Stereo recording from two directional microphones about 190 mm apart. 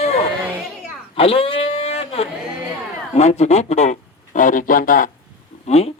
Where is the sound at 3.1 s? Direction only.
35° left (ahead or behind).